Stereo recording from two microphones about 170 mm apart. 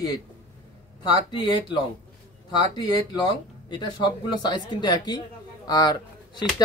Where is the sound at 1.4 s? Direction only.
25° left (ahead or behind).